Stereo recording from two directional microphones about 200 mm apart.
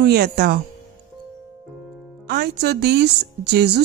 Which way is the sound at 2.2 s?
55° right (ahead or behind).